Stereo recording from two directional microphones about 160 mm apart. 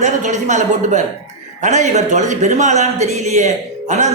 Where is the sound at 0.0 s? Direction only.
50° right (ahead or behind).